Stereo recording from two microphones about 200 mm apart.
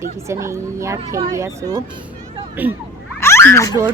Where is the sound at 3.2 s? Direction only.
10° left (ahead or behind).